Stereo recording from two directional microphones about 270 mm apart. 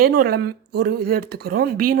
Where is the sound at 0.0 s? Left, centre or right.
Right.